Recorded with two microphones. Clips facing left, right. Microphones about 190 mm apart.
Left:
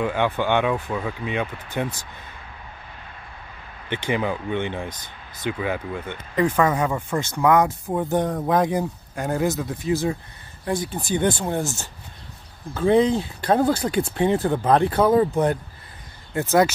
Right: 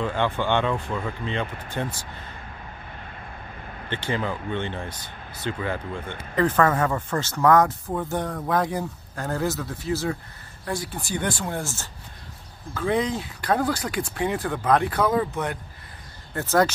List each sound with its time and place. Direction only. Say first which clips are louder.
0.0 s speech: left 2 dB; 10° left (ahead or behind)
3.9 s speech: left 3 dB; 15° left (ahead or behind); by 15.6 s 35° left (ahead or behind)
16.3 s speech: left 3 dB; 10° left (ahead or behind)